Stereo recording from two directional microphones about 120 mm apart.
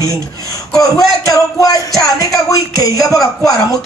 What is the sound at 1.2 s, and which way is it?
Speech, 30° left (ahead or behind).